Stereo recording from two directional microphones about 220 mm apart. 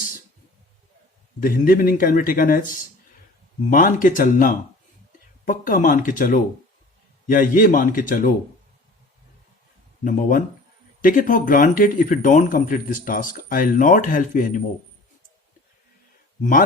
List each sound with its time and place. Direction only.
1.4 s a man's voice: 40° left (ahead or behind)
3.7 s a man's voice: 40° left (ahead or behind)
10.0 s a man's voice: 35° left (ahead or behind)
16.4 s a man's voice: 40° left (ahead or behind)